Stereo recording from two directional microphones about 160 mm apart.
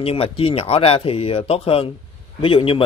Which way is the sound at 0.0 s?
35° left (ahead or behind).